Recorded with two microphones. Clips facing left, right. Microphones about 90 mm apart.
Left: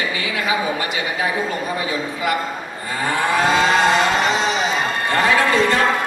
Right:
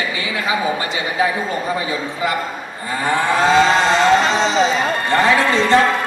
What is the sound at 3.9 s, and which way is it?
Music, 25° right (ahead or behind).